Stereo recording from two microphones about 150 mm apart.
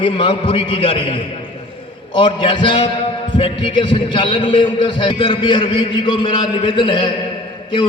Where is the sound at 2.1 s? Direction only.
35° left (ahead or behind).